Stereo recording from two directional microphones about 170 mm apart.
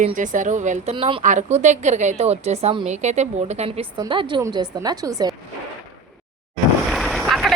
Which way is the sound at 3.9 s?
30° right (ahead or behind).